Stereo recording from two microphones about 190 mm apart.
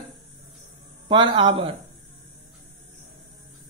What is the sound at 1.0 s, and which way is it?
Speech, 25° right (ahead or behind).